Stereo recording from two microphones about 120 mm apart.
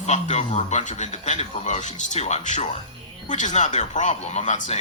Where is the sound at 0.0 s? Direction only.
75° left (ahead or behind).